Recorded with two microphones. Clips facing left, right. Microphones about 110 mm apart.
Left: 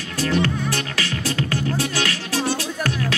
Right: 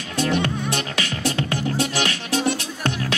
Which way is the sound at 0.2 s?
25° right (ahead or behind).